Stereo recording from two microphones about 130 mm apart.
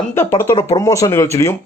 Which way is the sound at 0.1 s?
20° left (ahead or behind).